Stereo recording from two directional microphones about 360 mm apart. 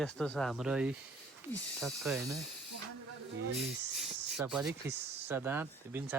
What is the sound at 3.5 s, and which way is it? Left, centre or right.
Speech, centre.